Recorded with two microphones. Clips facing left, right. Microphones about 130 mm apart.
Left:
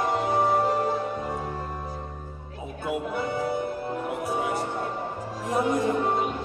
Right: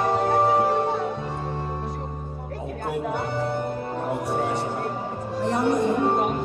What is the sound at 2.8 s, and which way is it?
Music, 65° right (ahead or behind).